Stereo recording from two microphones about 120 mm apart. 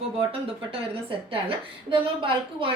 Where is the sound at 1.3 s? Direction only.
45° right (ahead or behind).